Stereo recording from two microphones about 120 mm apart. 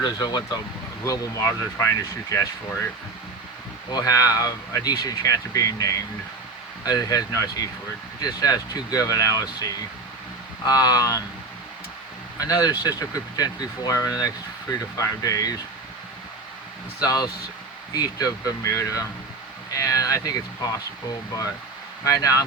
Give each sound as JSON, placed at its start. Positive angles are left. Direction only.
{"t": 0.0, "sound": "speech", "side_deg": 35}
{"t": 10.7, "sound": "speech", "side_deg": 30}
{"t": 12.4, "sound": "speech", "side_deg": 30}
{"t": 17.0, "sound": "speech", "side_deg": 30}
{"t": 22.0, "sound": "speech", "side_deg": 30}